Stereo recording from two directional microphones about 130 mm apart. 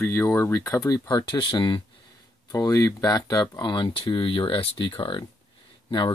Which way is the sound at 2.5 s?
25° left (ahead or behind).